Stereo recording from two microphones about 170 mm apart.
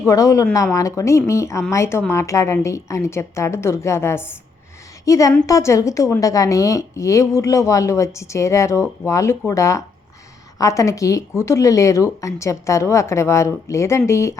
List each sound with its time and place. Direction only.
0.0 s a woman's voice: 20° left (ahead or behind)